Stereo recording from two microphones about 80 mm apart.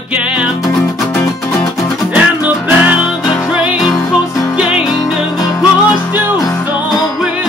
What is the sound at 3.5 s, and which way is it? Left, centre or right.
Music, centre.